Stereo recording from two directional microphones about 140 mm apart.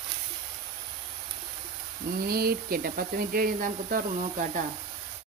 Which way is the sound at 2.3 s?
90° right.